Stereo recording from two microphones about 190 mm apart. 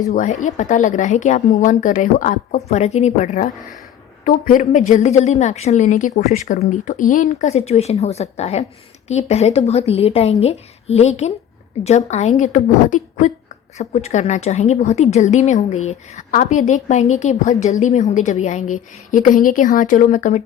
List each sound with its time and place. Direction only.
0.0 s a woman's voice: 40° left (ahead or behind)